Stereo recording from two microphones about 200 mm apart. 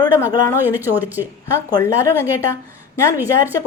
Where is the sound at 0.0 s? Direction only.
15° left (ahead or behind).